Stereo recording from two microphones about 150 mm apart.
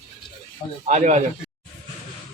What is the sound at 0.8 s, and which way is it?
Speech, 50° right (ahead or behind).